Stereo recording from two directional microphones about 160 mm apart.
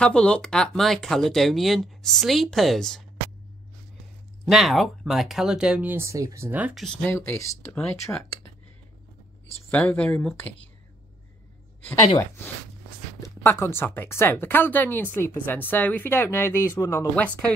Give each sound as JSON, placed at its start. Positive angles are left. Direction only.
{"t": 0.0, "sound": "speech", "side_deg": 5}
{"t": 4.5, "sound": "speech", "side_deg": 0}
{"t": 6.8, "sound": "speech", "side_deg": 5}
{"t": 9.7, "sound": "speech", "side_deg": 10}
{"t": 13.2, "sound": "speech", "side_deg": 15}